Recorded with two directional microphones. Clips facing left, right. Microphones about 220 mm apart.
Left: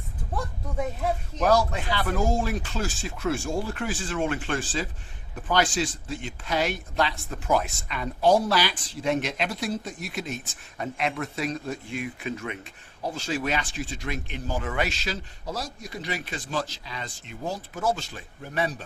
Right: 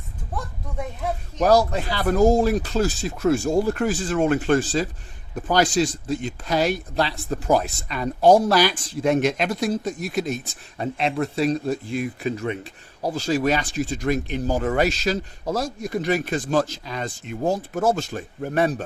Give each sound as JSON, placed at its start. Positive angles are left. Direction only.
{"t": 1.4, "sound": "speech", "side_deg": -35}